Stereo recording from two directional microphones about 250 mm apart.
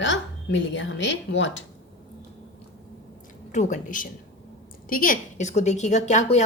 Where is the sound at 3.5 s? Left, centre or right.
Left.